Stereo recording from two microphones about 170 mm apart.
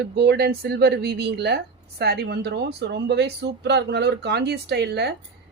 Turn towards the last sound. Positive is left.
turn(degrees=-75)  # may be behind; listen again after turning